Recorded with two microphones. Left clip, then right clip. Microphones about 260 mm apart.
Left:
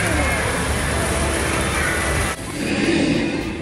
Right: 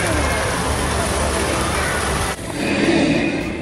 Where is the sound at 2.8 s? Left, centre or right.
Centre.